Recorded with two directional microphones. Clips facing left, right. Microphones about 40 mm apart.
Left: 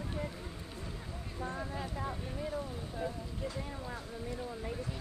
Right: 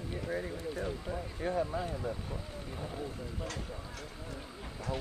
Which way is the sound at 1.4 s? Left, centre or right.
Right.